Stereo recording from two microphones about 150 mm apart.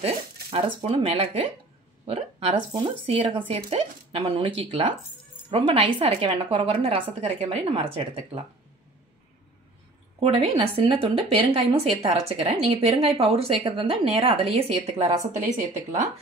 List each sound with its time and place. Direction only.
0.0 s a woman's voice: 40° right (ahead or behind)
10.2 s a woman's voice: 40° right (ahead or behind)